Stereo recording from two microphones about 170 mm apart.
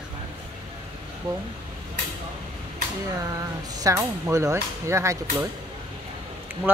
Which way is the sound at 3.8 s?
15° right (ahead or behind).